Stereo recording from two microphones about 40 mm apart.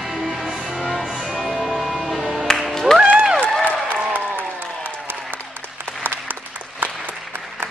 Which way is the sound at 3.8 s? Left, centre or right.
Right.